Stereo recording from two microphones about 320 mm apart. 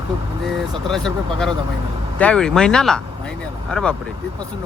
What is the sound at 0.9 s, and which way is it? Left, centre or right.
Speech, centre.